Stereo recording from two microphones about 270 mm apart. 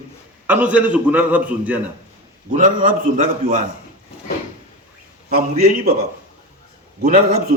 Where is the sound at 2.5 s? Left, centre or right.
Right.